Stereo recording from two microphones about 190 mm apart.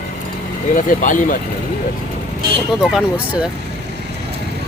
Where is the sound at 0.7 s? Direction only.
45° left (ahead or behind).